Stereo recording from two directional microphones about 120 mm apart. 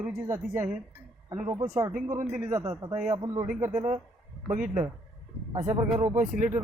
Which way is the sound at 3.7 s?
80° right.